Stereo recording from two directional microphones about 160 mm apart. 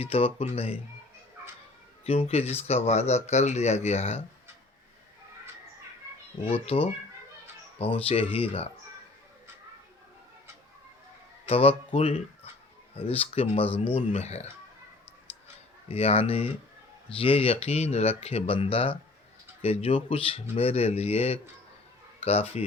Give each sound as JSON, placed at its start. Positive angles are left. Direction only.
{"t": 0.0, "sound": "speech", "side_deg": 40}
{"t": 2.0, "sound": "speech", "side_deg": 40}
{"t": 6.4, "sound": "speech", "side_deg": 40}
{"t": 11.4, "sound": "speech", "side_deg": 35}
{"t": 15.9, "sound": "speech", "side_deg": 40}